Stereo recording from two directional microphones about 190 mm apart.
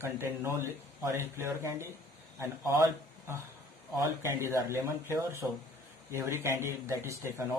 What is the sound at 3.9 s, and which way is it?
Speech, 15° right (ahead or behind).